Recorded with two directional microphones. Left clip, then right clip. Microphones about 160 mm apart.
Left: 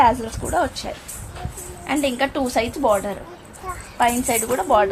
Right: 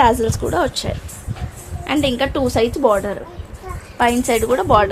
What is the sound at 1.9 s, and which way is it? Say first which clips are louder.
A woman's voice: right 3 dB; 55° right (ahead or behind).